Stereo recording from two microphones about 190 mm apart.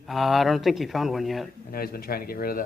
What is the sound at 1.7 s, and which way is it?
Speech, 50° left (ahead or behind).